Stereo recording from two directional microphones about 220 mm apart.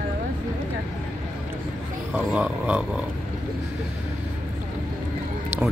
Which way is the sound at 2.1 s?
5° right (ahead or behind).